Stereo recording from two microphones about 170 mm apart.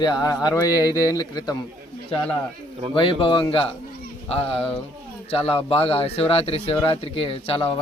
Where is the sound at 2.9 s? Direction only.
30° left (ahead or behind).